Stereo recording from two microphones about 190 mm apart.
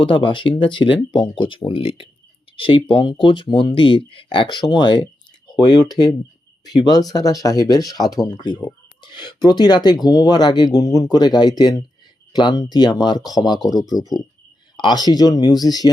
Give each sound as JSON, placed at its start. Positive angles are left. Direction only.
{"t": 0.0, "sound": "speech", "side_deg": 25}